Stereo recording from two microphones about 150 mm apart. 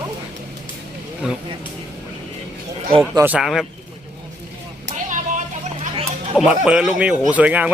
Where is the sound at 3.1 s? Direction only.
10° right (ahead or behind).